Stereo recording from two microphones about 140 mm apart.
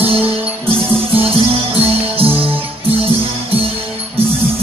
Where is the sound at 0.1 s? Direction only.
40° right (ahead or behind).